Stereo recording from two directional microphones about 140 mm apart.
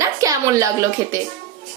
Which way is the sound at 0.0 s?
25° right (ahead or behind).